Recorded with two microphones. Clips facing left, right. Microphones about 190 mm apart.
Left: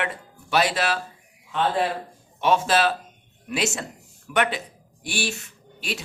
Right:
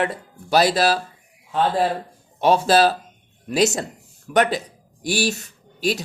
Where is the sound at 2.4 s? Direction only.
35° right (ahead or behind).